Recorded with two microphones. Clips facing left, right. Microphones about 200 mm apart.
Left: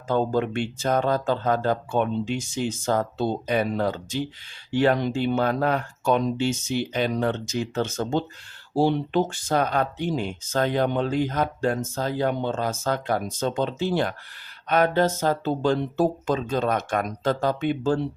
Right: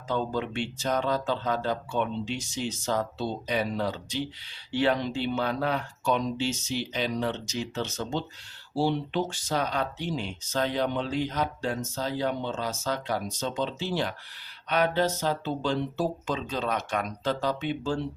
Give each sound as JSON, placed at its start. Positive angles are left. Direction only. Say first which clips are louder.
{"t": 0.1, "sound": "speech", "louder": "left 6 dB", "side_deg": 50}